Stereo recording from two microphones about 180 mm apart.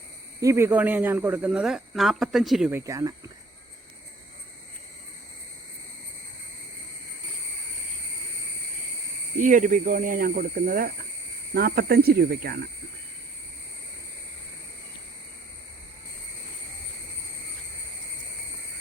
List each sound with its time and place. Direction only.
0.3 s speech: 15° right (ahead or behind)
9.4 s speech: 45° right (ahead or behind)